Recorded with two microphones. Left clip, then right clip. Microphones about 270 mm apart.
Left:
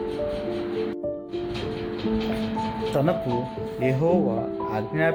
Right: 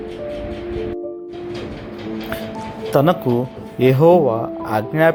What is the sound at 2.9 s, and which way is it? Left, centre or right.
Speech, centre.